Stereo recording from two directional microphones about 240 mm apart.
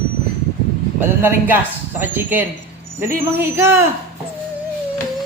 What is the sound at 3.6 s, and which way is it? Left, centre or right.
Speech, centre.